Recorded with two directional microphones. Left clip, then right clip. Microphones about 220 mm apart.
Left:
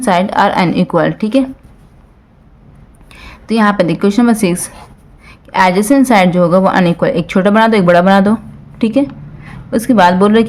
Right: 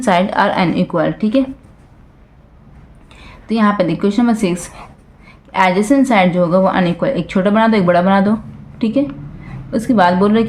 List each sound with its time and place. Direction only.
0.0 s a woman's voice: 15° left (ahead or behind)
3.1 s a woman's voice: 25° left (ahead or behind)